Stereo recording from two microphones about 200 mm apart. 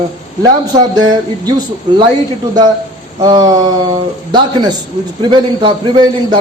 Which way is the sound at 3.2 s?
20° right (ahead or behind).